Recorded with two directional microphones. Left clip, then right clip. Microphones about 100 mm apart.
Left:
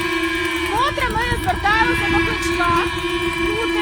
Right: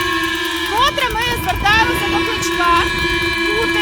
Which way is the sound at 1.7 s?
10° right (ahead or behind).